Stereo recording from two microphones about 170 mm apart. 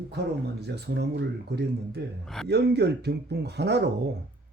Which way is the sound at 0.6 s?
75° right (ahead or behind).